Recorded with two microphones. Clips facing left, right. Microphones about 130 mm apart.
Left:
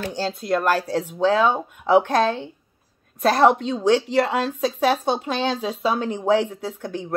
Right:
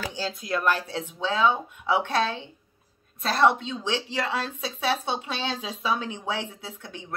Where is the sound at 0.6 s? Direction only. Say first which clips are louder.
Left 4 dB; 40° left (ahead or behind).